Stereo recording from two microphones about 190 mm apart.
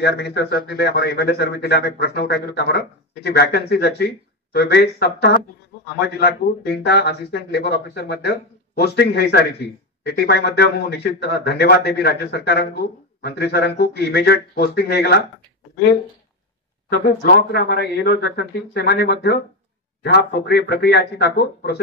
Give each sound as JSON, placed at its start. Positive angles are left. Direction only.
{"t": 0.0, "sound": "speech", "side_deg": 60}
{"t": 16.9, "sound": "speech", "side_deg": 55}